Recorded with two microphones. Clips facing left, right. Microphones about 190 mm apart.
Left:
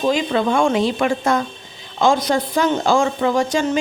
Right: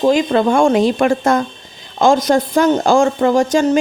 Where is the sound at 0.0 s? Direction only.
45° right (ahead or behind).